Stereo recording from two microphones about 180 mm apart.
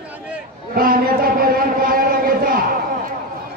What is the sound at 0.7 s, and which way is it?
Speech, 50° right (ahead or behind).